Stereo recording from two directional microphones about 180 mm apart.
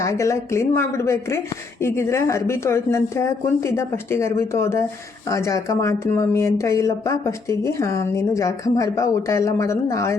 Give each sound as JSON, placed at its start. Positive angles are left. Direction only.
{"t": 0.0, "sound": "speech", "side_deg": 15}